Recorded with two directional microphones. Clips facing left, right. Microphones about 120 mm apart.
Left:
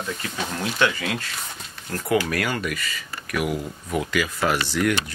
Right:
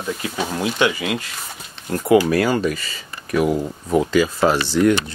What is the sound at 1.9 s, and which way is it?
Speech, 25° right (ahead or behind).